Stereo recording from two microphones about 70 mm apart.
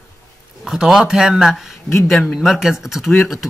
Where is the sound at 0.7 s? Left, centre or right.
Centre.